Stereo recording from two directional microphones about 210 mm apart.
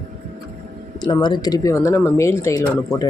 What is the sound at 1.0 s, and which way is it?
Speech, 20° left (ahead or behind).